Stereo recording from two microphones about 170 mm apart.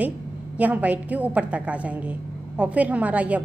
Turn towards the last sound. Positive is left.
turn(degrees=-10)  # may be behind; listen again after turning